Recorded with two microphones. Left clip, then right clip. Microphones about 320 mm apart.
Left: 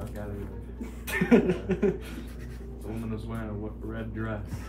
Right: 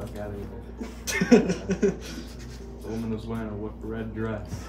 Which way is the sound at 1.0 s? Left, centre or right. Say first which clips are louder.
Right 2 dB; left.